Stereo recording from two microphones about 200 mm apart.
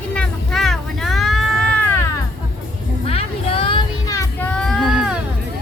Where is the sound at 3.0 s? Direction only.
30° left (ahead or behind).